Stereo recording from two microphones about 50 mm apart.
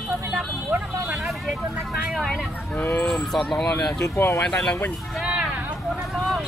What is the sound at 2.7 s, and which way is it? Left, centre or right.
Speech, left.